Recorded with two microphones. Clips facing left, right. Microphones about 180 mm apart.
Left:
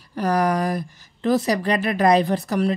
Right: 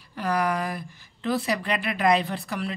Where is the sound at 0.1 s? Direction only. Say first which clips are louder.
Left 5 dB; 40° left (ahead or behind).